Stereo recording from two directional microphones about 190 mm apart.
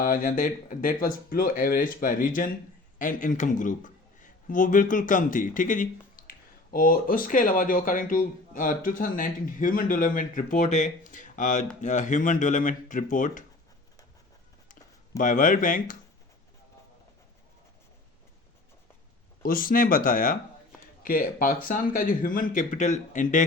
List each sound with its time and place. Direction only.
0.0 s a man's voice: 45° left (ahead or behind)
15.2 s a man's voice: 45° left (ahead or behind)
19.4 s a man's voice: 50° left (ahead or behind)